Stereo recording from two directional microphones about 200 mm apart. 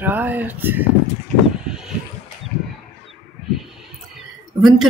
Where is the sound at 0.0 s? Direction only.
10° right (ahead or behind).